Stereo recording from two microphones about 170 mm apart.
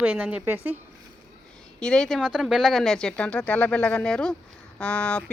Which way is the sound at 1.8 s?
5° left (ahead or behind).